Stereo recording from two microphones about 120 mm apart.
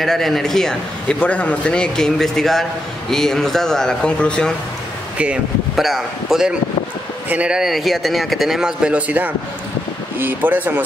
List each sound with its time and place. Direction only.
0.0 s speech: 5° left (ahead or behind)
5.1 s speech: 10° right (ahead or behind)